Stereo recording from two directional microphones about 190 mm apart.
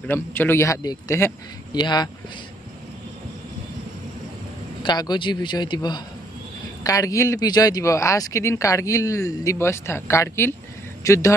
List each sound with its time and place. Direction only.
0.0 s speech: 10° left (ahead or behind)
4.8 s a man's voice: 20° left (ahead or behind)